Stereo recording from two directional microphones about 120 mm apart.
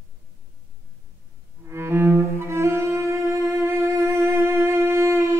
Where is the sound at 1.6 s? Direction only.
20° right (ahead or behind).